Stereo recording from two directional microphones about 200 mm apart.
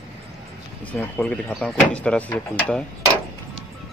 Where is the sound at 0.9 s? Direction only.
5° left (ahead or behind).